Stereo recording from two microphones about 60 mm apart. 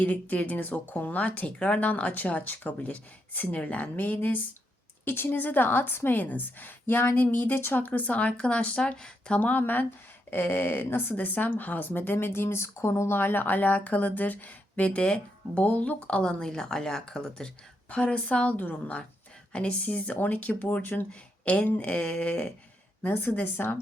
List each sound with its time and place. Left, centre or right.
0.0 s speech: left
5.0 s a woman's voice: left; by 9.4 s centre
9.4 s a woman's voice: left
23.0 s a woman's voice: left